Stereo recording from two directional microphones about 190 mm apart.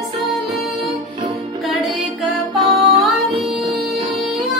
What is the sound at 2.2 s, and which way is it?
Music, centre (ahead or behind).